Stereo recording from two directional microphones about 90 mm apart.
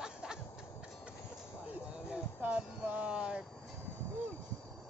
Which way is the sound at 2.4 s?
15° right (ahead or behind).